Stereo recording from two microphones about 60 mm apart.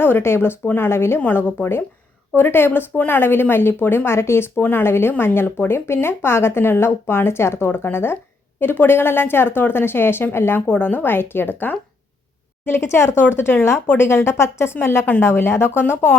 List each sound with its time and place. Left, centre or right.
0.0 s speech: left
10.7 s speech: left